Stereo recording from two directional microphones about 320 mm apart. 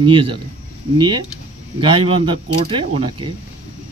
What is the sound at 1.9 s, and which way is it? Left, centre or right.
Speech, centre.